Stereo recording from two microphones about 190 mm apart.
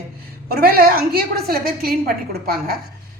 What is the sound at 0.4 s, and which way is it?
A woman's voice, 50° right (ahead or behind).